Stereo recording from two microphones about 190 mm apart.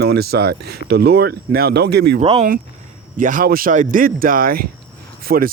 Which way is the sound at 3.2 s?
45° right (ahead or behind).